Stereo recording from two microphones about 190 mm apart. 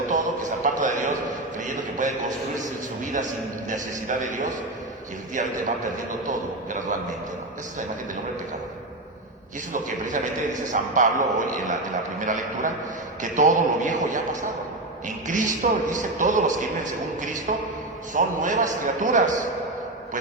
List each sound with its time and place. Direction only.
0.1 s music: 40° right (ahead or behind)
1.5 s a sound: 40° right (ahead or behind)
2.6 s a man's voice: 40° right (ahead or behind)
5.4 s a man's voice: 40° right (ahead or behind)
9.7 s a man's voice: 45° right (ahead or behind)